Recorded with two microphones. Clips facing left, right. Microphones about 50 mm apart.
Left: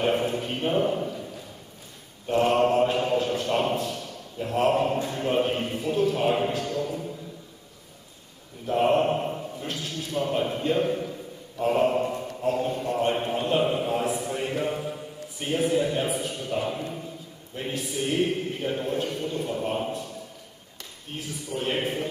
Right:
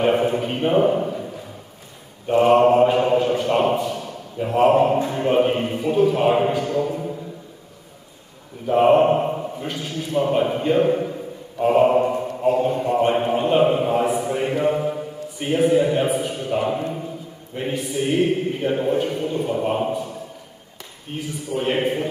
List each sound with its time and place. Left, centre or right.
0.0 s a sound: centre
2.2 s mantra: centre
5.0 s a man's voice: centre
8.6 s mantra: centre
9.7 s a sound: centre
14.2 s mantra: centre
15.3 s a sound: centre
17.7 s chant: centre
18.0 s a man's voice: centre